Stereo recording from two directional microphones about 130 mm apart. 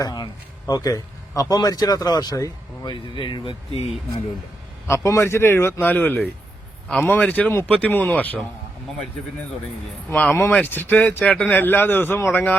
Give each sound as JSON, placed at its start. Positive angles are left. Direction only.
{"t": 0.0, "sound": "a sound", "side_deg": 30}
{"t": 0.7, "sound": "speech", "side_deg": 25}
{"t": 4.9, "sound": "a man's voice", "side_deg": 20}
{"t": 10.1, "sound": "speech", "side_deg": 10}